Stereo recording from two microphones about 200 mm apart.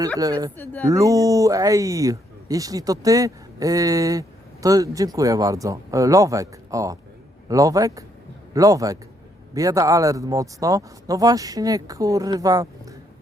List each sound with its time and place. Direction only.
0.2 s speech: 15° right (ahead or behind)
0.5 s speech: 10° left (ahead or behind)
0.9 s speech: 15° right (ahead or behind)